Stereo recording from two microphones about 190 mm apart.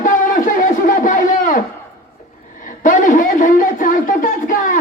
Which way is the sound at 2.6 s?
45° left (ahead or behind).